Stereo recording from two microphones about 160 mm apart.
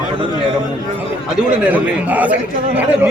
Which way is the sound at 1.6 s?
10° right (ahead or behind).